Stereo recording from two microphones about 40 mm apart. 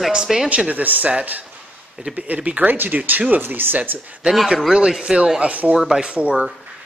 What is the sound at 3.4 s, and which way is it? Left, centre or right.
Speech, right.